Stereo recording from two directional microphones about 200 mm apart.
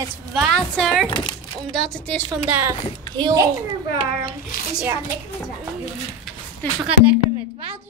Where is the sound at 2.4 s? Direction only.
10° right (ahead or behind).